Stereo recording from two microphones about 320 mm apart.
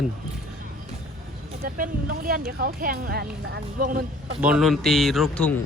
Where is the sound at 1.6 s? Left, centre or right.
Right.